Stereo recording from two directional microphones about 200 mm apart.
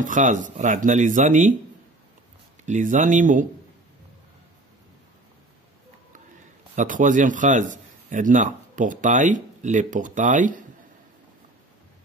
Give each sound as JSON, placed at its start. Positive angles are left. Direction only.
{"t": 0.0, "sound": "speech", "side_deg": -40}
{"t": 2.6, "sound": "speech", "side_deg": -35}
{"t": 6.7, "sound": "a man's voice", "side_deg": -40}